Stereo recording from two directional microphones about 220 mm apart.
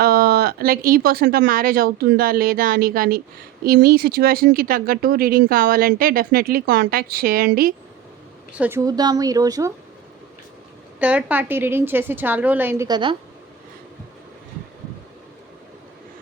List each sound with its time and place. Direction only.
0.0 s speech: 45° right (ahead or behind)
8.5 s a woman's voice: 10° right (ahead or behind)
11.0 s a woman's voice: 5° right (ahead or behind)